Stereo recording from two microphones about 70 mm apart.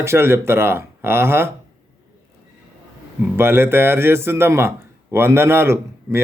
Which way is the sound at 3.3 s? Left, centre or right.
Right.